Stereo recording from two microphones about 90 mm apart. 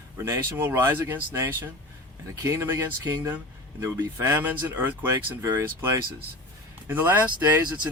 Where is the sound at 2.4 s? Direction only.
25° right (ahead or behind).